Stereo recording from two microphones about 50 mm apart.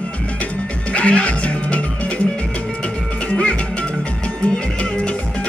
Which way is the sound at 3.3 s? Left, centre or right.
Left.